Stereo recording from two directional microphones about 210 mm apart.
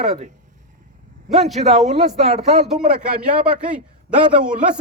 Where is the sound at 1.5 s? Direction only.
30° right (ahead or behind).